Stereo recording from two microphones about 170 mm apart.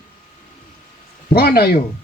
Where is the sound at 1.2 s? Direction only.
65° left (ahead or behind).